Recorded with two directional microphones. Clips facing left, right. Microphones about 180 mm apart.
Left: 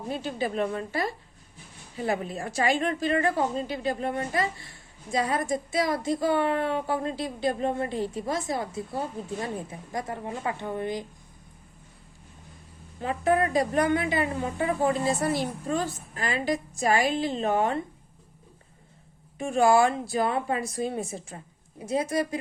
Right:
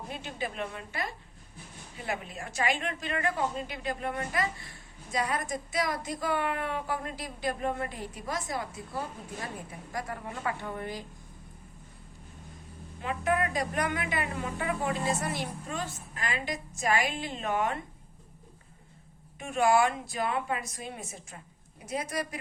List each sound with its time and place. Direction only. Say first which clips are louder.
0.1 s a woman's voice: left 9 dB; 35° left (ahead or behind)
13.0 s a woman's voice: left 5 dB; 35° left (ahead or behind)
19.4 s a woman's voice: left 4 dB; 30° left (ahead or behind)